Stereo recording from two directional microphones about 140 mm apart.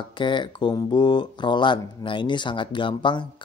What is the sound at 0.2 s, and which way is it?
Speech, 35° left (ahead or behind).